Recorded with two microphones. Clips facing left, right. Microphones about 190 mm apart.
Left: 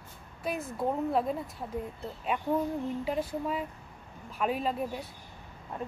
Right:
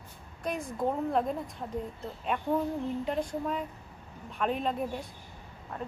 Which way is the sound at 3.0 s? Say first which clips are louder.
Even; 5° left (ahead or behind).